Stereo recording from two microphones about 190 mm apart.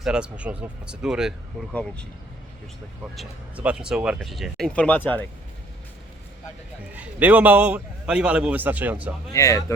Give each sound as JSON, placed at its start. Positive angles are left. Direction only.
{"t": 0.0, "sound": "speech", "side_deg": -5}
{"t": 3.2, "sound": "speech", "side_deg": -5}
{"t": 6.9, "sound": "a man's voice", "side_deg": -10}
{"t": 9.3, "sound": "speech", "side_deg": 15}